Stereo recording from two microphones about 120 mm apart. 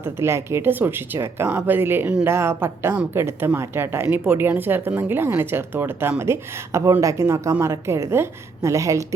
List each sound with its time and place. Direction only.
0.0 s a woman's voice: 20° right (ahead or behind)